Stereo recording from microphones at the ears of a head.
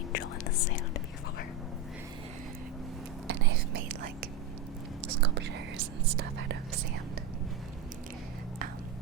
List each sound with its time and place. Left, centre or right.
0.1 s whispering: left
3.2 s whispering: right